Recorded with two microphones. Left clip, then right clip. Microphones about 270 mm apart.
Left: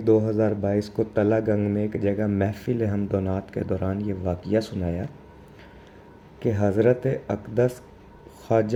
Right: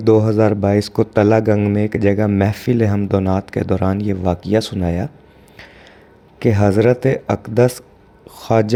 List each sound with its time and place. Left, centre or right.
0.1 s speech: right
6.4 s speech: right